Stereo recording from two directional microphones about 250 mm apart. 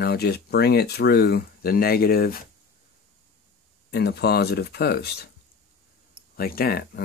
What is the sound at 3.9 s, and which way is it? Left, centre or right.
Speech, left.